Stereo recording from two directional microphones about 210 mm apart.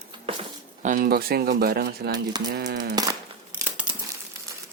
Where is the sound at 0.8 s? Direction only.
40° right (ahead or behind).